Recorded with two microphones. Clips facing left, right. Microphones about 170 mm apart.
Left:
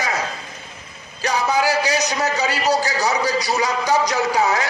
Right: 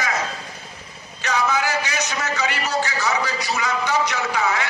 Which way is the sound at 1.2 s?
35° left (ahead or behind).